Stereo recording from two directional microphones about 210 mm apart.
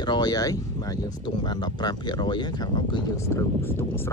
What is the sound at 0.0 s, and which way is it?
Speech, 20° left (ahead or behind).